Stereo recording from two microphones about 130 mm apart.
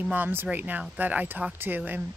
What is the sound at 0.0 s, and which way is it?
Speech, 15° right (ahead or behind).